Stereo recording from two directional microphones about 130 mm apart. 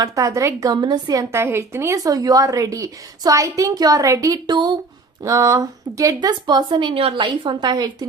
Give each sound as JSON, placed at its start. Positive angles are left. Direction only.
{"t": 0.0, "sound": "a woman's voice", "side_deg": -25}
{"t": 1.3, "sound": "a woman's voice", "side_deg": -20}